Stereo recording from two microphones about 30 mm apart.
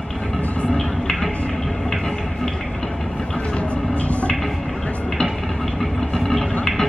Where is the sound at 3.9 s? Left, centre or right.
Left.